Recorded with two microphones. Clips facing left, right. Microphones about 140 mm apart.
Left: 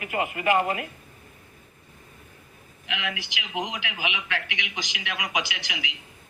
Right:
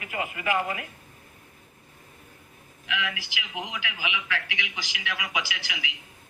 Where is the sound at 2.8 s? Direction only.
20° left (ahead or behind).